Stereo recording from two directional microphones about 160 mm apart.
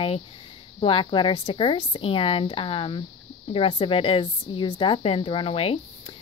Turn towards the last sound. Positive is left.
turn(degrees=35)  # may be behind; listen again after turning